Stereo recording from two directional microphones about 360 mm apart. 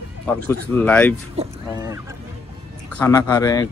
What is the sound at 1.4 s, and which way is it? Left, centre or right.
Speech, centre.